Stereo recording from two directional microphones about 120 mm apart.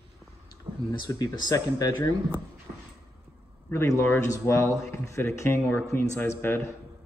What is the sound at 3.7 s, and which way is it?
Speech, 25° left (ahead or behind).